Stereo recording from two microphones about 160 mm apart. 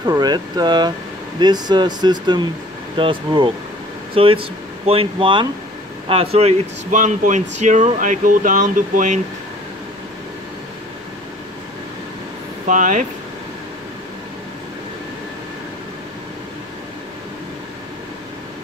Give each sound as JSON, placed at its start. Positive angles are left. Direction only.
{"t": 0.0, "sound": "speech", "side_deg": -25}
{"t": 6.3, "sound": "speech", "side_deg": -45}
{"t": 12.6, "sound": "speech", "side_deg": -55}